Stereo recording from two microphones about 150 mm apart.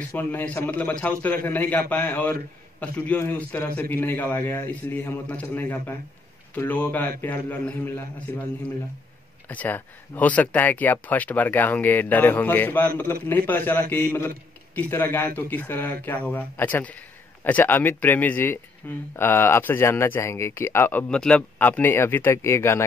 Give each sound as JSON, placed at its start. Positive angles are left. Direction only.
{"t": 0.1, "sound": "speech", "side_deg": 10}
{"t": 9.5, "sound": "speech", "side_deg": 10}